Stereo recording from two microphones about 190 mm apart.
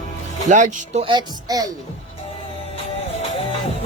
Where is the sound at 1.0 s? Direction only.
25° right (ahead or behind).